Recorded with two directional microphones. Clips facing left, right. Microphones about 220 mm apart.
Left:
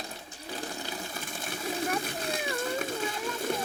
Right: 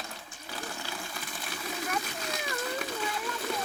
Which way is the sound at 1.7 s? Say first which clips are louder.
Left 3 dB; 30° left (ahead or behind).